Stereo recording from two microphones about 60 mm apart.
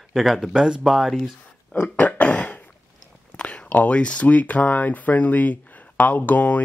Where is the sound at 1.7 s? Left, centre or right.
Left.